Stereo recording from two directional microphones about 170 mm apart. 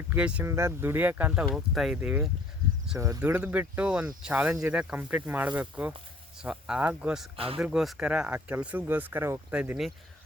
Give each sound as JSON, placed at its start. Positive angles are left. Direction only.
{"t": 0.1, "sound": "speech", "side_deg": -10}
{"t": 7.3, "sound": "speech", "side_deg": -35}
{"t": 7.6, "sound": "speech", "side_deg": -5}